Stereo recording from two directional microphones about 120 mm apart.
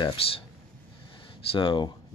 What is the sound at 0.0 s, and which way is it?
Speech, 50° left (ahead or behind).